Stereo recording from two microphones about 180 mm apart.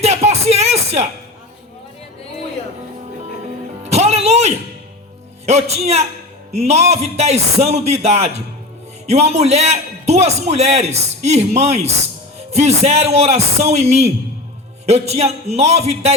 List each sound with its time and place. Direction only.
0.0 s music: 35° right (ahead or behind)
3.8 s music: 35° right (ahead or behind)
5.5 s a man's voice: 35° right (ahead or behind)